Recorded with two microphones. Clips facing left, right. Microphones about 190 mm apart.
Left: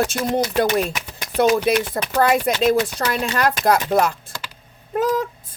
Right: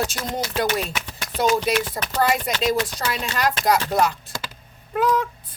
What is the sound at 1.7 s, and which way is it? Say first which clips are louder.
Speech: left 4 dB; 55° left (ahead or behind).